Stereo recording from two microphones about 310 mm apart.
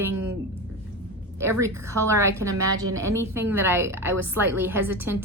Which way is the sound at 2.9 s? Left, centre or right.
Centre.